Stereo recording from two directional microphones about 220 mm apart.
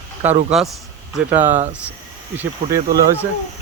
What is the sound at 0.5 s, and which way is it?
Speech, 5° right (ahead or behind).